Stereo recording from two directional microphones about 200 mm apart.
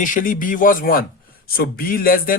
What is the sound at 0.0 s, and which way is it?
Speech, 40° left (ahead or behind).